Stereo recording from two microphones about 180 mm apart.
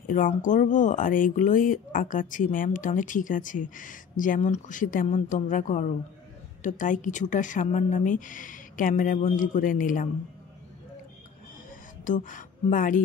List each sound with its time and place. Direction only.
0.1 s speech: 45° left (ahead or behind)
12.0 s speech: 45° left (ahead or behind)